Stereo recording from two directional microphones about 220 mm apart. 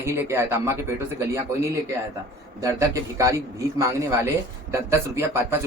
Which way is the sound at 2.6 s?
15° right (ahead or behind).